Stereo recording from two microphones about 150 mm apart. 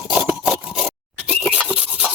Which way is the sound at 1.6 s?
5° right (ahead or behind).